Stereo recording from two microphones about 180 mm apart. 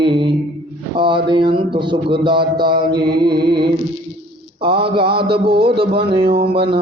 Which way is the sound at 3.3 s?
60° right (ahead or behind).